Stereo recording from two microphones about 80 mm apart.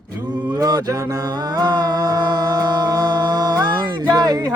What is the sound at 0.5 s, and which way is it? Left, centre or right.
Mantra, right.